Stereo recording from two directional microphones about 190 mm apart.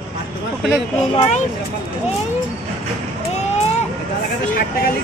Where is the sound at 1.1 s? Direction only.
30° left (ahead or behind).